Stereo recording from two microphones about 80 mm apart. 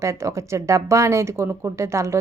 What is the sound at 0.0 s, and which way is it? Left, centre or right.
Speech, right.